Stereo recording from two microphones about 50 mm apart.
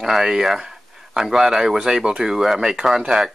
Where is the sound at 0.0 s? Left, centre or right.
Centre.